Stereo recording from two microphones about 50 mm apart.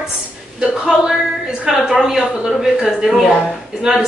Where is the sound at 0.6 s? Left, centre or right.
Centre.